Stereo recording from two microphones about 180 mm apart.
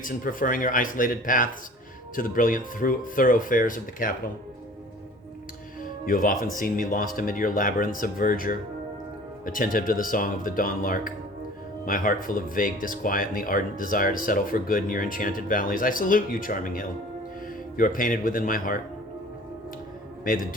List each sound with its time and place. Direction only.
0.0 s speech: 50° left (ahead or behind)
6.1 s speech: 50° left (ahead or behind)